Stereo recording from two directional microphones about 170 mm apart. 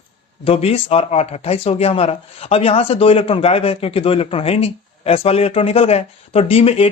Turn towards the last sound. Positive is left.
turn(degrees=35)  # may be behind; listen again after turning